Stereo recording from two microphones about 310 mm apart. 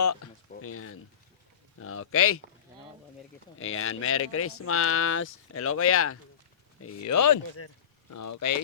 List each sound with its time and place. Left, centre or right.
0.0 s speech: left
3.6 s speech: left
6.8 s speech: left
8.1 s speech: left